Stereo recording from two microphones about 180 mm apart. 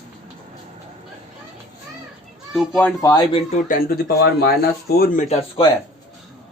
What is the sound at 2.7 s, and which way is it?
Speech, 15° left (ahead or behind).